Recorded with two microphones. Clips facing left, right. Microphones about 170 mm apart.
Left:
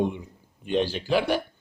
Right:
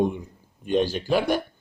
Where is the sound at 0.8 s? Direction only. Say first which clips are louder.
Right 1 dB; 45° right (ahead or behind).